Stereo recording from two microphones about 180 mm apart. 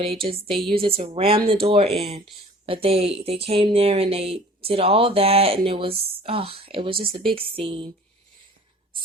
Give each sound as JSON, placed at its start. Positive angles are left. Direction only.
{"t": 0.0, "sound": "speech", "side_deg": -30}